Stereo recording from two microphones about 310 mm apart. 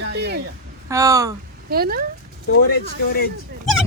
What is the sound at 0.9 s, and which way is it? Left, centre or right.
Speech, centre.